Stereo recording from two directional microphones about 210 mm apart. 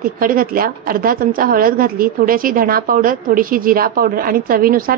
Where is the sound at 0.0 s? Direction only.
40° right (ahead or behind).